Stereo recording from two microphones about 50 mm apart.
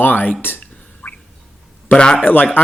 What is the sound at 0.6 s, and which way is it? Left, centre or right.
Whispering, left.